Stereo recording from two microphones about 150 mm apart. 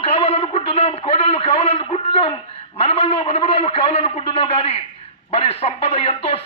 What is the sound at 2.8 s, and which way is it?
A man's voice, 40° left (ahead or behind).